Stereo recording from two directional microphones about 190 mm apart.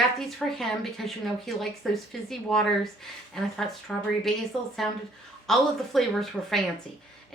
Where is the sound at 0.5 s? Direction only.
Centre (ahead or behind).